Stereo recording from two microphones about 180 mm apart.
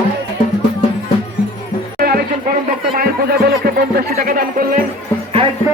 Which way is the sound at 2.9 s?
60° right (ahead or behind).